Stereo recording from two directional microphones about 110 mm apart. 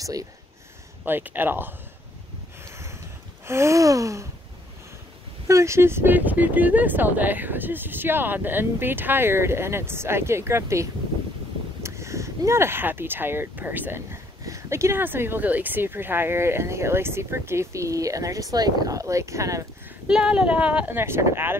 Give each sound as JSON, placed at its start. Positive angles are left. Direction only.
{"t": 0.0, "sound": "speech", "side_deg": -35}
{"t": 1.0, "sound": "speech", "side_deg": -20}
{"t": 2.6, "sound": "a sound", "side_deg": -25}
{"t": 3.4, "sound": "speech", "side_deg": -25}
{"t": 5.5, "sound": "speech", "side_deg": -25}
{"t": 20.1, "sound": "speech", "side_deg": -5}